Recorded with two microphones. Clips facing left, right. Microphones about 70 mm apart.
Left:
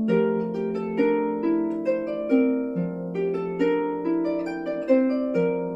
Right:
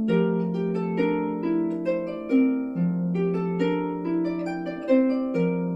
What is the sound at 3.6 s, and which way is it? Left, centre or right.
Harp, centre.